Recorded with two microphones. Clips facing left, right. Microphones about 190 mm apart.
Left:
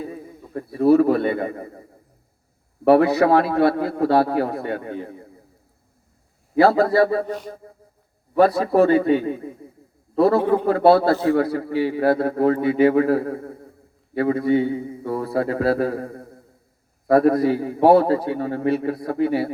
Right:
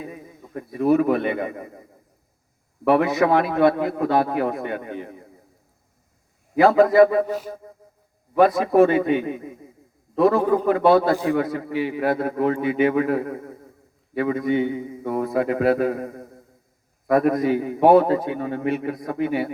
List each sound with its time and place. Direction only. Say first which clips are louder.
0.0 s a man's voice: left 3 dB; 30° left (ahead or behind)
2.8 s a man's voice: left 3 dB; 35° left (ahead or behind)
6.6 s a man's voice: right 2 dB; 35° left (ahead or behind)
8.4 s a man's voice: even; 35° left (ahead or behind)